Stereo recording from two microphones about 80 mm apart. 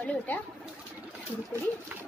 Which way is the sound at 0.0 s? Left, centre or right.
Centre.